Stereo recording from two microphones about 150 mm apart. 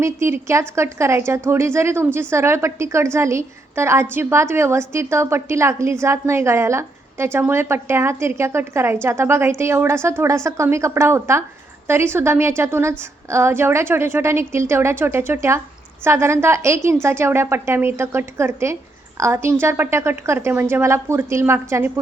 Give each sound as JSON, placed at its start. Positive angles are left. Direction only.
{"t": 0.0, "sound": "a woman's voice", "side_deg": -15}